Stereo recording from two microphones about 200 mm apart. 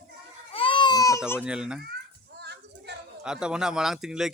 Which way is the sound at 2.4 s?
55° right (ahead or behind).